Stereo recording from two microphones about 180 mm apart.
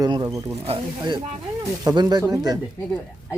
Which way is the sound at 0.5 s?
35° right (ahead or behind).